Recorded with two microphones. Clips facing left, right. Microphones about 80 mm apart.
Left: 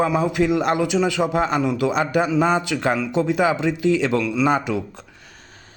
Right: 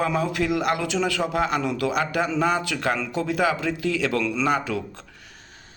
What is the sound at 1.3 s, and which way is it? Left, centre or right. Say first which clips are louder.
Speech: left 2 dB; left.